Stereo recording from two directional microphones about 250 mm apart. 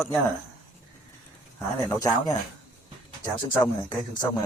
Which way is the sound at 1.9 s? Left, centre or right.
Centre.